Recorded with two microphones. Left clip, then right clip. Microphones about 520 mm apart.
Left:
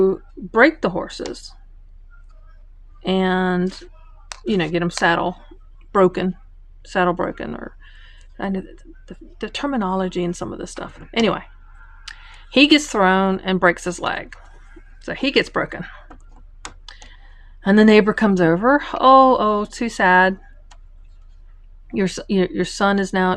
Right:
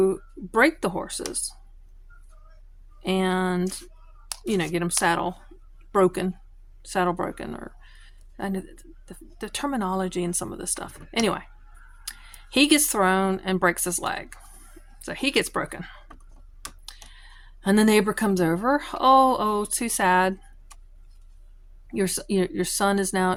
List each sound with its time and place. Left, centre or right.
0.0 s speech: right
3.0 s speech: right
21.8 s speech: right